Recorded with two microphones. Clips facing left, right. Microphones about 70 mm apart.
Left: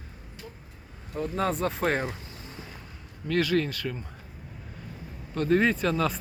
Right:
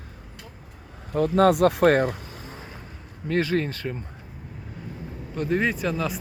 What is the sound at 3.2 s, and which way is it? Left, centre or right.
Speech, right.